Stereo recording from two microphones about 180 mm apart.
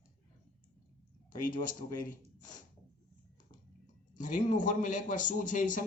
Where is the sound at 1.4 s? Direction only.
50° left (ahead or behind).